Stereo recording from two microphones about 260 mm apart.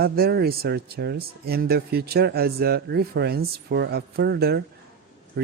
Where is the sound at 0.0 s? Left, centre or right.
Right.